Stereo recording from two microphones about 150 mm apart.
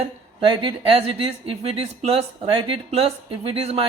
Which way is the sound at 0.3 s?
35° right (ahead or behind).